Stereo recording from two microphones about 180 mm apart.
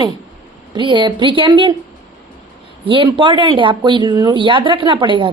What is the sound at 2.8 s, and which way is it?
Speech, 25° right (ahead or behind).